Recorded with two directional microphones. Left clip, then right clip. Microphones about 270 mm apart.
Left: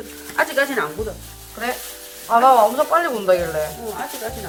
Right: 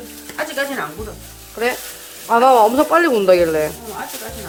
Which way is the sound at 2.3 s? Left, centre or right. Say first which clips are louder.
Right 2 dB; right.